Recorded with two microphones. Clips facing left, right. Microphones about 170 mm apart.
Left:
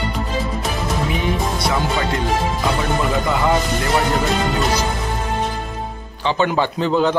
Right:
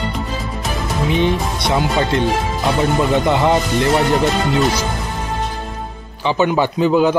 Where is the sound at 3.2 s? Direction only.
25° right (ahead or behind).